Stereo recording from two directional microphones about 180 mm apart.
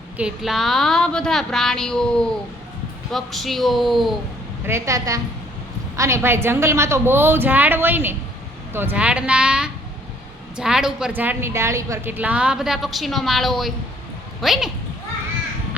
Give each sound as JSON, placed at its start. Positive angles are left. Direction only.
{"t": 0.2, "sound": "a woman's voice", "side_deg": -5}
{"t": 4.6, "sound": "a woman's voice", "side_deg": -15}